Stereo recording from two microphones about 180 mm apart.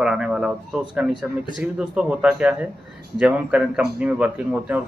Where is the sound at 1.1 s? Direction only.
25° left (ahead or behind).